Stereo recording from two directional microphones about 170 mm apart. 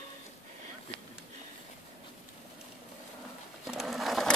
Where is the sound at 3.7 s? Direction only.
Centre (ahead or behind).